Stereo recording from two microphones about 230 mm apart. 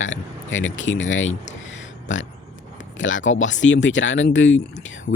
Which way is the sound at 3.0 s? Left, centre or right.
Left.